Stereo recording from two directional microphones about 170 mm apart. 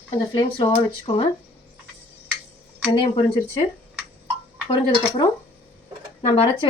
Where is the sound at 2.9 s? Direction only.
30° left (ahead or behind).